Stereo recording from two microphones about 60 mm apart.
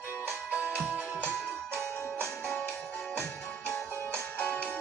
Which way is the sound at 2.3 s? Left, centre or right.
Centre.